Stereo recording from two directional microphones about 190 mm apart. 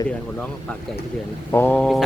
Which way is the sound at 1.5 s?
10° left (ahead or behind).